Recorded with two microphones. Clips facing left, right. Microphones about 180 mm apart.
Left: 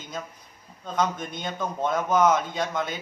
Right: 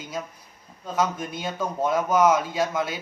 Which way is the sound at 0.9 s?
5° right (ahead or behind).